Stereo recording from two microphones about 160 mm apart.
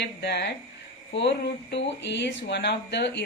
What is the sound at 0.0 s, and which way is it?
Speech, 90° left.